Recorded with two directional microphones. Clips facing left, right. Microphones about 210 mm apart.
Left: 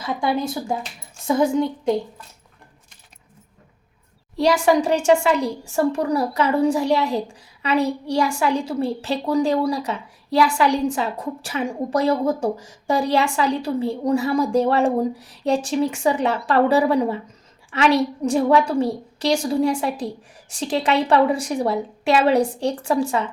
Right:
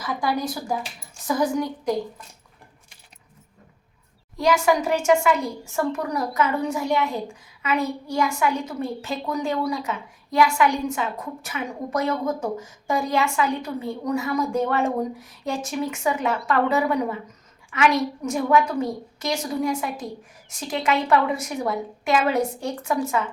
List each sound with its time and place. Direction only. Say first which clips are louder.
0.0 s speech: left 3 dB; 25° left (ahead or behind)
4.4 s a woman's voice: left 3 dB; 30° left (ahead or behind)